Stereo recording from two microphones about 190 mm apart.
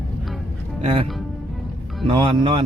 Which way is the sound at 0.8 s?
35° right (ahead or behind).